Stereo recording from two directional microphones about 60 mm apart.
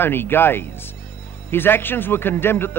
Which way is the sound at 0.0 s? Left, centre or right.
Left.